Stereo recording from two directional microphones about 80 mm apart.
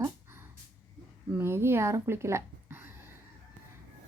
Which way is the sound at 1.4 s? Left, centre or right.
Right.